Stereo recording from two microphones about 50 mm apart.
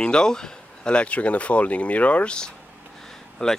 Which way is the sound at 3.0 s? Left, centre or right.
Centre.